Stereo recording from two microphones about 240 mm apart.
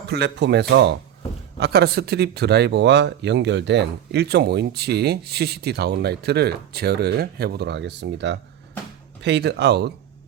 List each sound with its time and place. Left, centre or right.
0.1 s speech: right